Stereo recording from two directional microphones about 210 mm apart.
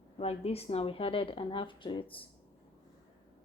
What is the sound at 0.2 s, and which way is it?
Speech, 30° left (ahead or behind).